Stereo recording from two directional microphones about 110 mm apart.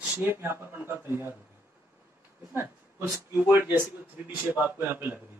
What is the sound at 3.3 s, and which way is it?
A man's voice, 20° right (ahead or behind).